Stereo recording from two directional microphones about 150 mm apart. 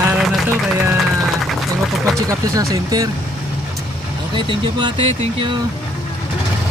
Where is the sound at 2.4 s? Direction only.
20° right (ahead or behind).